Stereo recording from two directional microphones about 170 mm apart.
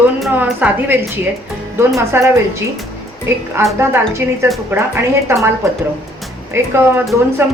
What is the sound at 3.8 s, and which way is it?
A woman's voice, 15° right (ahead or behind).